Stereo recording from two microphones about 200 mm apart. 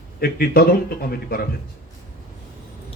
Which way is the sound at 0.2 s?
50° left (ahead or behind).